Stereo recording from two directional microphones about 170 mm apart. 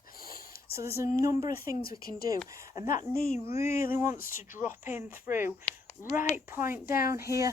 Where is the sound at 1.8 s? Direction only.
60° left (ahead or behind).